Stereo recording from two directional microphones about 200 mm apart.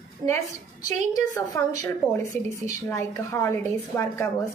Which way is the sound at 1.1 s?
15° left (ahead or behind).